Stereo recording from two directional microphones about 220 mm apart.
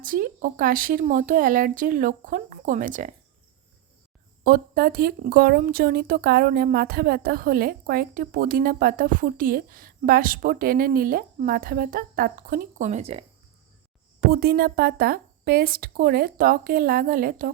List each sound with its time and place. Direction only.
0.0 s a woman's voice: 40° right (ahead or behind)
4.4 s a woman's voice: 45° right (ahead or behind); by 13.2 s 25° right (ahead or behind)
14.3 s a woman's voice: 45° right (ahead or behind)